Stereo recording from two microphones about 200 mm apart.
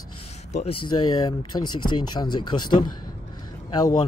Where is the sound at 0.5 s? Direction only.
30° left (ahead or behind).